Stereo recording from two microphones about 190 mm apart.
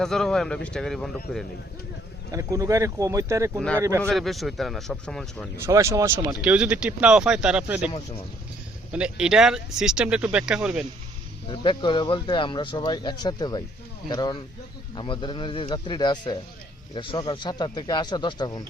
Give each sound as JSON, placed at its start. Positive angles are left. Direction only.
{"t": 0.0, "sound": "speech", "side_deg": 0}
{"t": 2.3, "sound": "speech", "side_deg": -15}
{"t": 4.0, "sound": "speech", "side_deg": 0}
{"t": 5.6, "sound": "speech", "side_deg": -15}
{"t": 7.9, "sound": "speech", "side_deg": 30}
{"t": 8.9, "sound": "speech", "side_deg": -5}
{"t": 11.4, "sound": "speech", "side_deg": 25}